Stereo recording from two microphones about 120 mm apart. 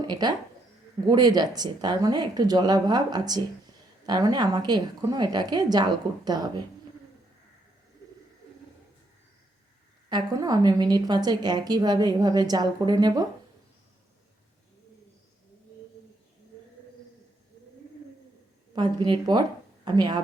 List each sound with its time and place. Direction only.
0.0 s a woman's voice: 35° right (ahead or behind)
10.1 s a woman's voice: 35° right (ahead or behind)
18.7 s a woman's voice: 40° right (ahead or behind)